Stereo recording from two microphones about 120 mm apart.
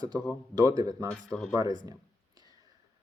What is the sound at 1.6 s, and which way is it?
Speech, 30° right (ahead or behind).